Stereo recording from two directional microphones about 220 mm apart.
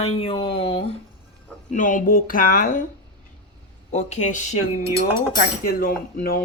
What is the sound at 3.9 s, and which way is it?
Speech, 30° left (ahead or behind).